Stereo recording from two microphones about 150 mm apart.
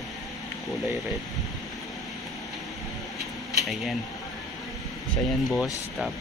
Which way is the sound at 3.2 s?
Centre (ahead or behind).